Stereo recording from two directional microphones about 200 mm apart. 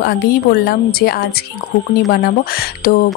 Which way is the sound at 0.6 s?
50° left (ahead or behind).